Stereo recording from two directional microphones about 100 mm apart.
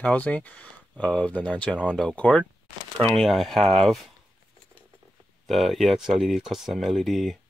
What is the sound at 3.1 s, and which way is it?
Speech, centre (ahead or behind).